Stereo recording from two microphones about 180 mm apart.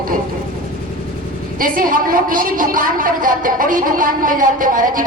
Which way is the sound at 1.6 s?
50° right (ahead or behind).